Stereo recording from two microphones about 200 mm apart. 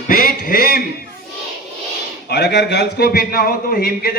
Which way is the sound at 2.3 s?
55° left (ahead or behind).